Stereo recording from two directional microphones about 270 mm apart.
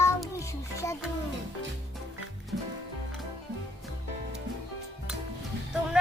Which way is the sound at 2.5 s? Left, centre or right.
Right.